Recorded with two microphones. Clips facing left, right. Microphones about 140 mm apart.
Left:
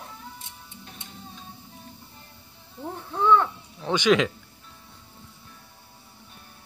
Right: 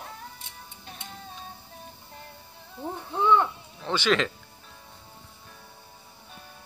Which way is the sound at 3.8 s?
10° left (ahead or behind).